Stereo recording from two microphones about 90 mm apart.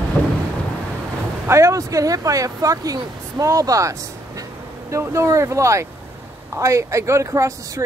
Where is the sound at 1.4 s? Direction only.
30° right (ahead or behind).